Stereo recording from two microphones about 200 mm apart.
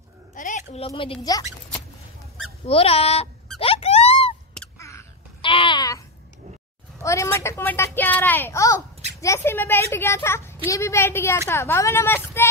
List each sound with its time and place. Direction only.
0.3 s a woman's voice: 40° left (ahead or behind); by 1.4 s 25° left (ahead or behind)
2.6 s speech: 30° left (ahead or behind)
3.5 s squeak: 30° left (ahead or behind)
4.6 s a sound: 15° left (ahead or behind)
5.4 s babbling: 25° left (ahead or behind)
7.0 s a woman's voice: 15° left (ahead or behind)